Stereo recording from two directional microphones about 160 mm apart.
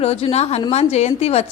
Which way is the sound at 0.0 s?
40° left (ahead or behind).